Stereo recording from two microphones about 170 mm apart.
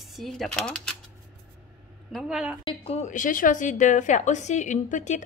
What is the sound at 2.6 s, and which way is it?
A woman's voice, 30° left (ahead or behind).